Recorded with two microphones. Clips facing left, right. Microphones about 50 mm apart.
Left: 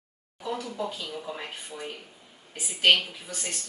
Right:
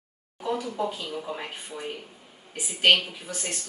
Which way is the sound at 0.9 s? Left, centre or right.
Right.